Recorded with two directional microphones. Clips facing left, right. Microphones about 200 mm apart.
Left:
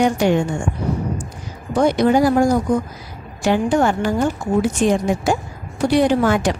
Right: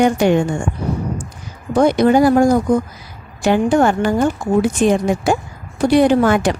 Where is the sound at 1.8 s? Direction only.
55° right (ahead or behind).